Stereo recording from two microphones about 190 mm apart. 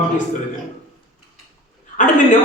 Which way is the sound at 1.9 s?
40° left (ahead or behind).